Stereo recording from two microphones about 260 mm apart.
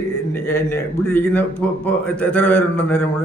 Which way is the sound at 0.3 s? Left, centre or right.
Centre.